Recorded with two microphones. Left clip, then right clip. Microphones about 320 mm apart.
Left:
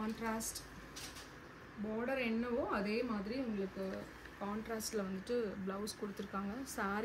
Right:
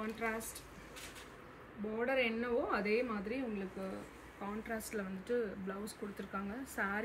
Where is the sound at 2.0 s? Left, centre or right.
Centre.